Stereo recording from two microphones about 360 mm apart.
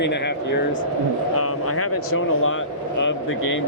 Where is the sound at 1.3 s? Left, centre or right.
Left.